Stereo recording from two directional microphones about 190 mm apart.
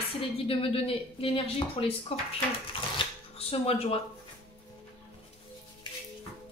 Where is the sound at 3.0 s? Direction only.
30° left (ahead or behind).